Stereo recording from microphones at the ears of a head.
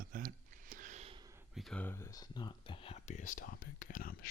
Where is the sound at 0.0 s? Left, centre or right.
Right.